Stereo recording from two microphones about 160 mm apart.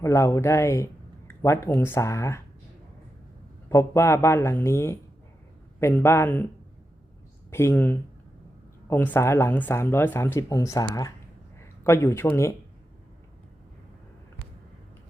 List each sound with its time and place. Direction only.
0.0 s speech: 20° left (ahead or behind)
3.7 s speech: 15° left (ahead or behind)
7.5 s speech: 15° left (ahead or behind)